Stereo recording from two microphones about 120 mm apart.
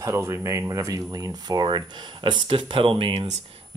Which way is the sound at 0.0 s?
20° right (ahead or behind).